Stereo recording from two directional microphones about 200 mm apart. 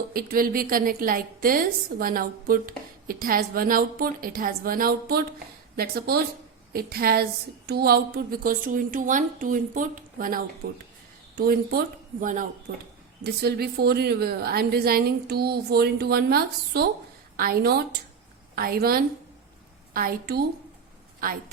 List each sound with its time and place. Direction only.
0.1 s a woman's voice: 45° right (ahead or behind)
10.6 s a woman's voice: 55° right (ahead or behind)
12.7 s a woman's voice: 55° right (ahead or behind)